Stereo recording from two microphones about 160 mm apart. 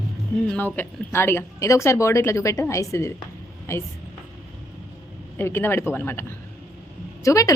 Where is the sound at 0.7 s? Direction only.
15° left (ahead or behind).